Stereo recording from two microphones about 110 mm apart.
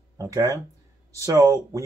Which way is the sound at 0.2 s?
30° right (ahead or behind).